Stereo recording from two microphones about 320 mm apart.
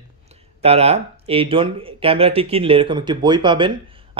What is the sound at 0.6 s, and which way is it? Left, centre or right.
Speech, centre.